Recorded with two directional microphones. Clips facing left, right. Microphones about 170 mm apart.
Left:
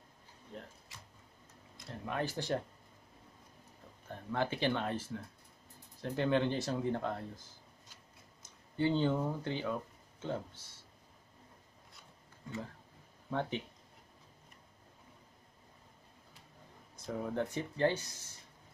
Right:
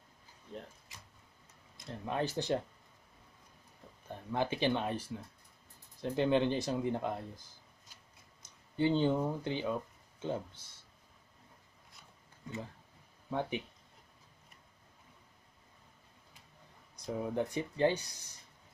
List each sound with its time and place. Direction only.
1.9 s speech: 20° right (ahead or behind)
4.1 s speech: 15° right (ahead or behind)
8.4 s speech: 20° right (ahead or behind)
13.3 s speech: 10° right (ahead or behind)
16.9 s speech: 15° right (ahead or behind)